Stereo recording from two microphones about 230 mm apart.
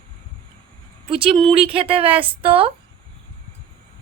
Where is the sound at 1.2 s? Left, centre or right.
Right.